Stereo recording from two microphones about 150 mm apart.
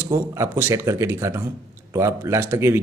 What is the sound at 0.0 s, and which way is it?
Speech, 15° right (ahead or behind).